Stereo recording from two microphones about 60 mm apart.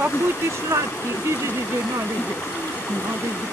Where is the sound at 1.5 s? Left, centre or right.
Left.